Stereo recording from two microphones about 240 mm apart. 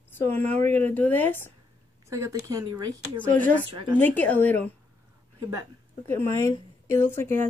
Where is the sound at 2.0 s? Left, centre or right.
Centre.